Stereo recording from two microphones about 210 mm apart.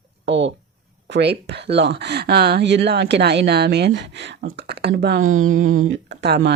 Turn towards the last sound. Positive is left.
turn(degrees=-50)  # may be behind; listen again after turning